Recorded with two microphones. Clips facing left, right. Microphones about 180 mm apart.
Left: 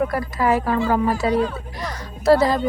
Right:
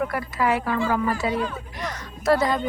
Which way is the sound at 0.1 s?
35° left (ahead or behind).